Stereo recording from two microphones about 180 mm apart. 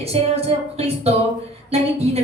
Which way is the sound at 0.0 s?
35° right (ahead or behind).